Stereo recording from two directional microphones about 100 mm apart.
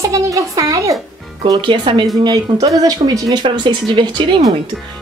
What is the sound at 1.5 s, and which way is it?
A child's voice, 50° right (ahead or behind).